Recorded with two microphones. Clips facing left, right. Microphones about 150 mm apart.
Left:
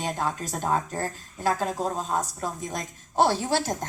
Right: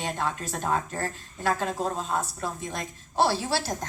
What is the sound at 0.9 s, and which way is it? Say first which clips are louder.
Speech: left 1 dB; 15° left (ahead or behind).